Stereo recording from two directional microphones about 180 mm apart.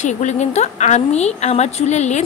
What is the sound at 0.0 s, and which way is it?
A woman's voice, 40° left (ahead or behind).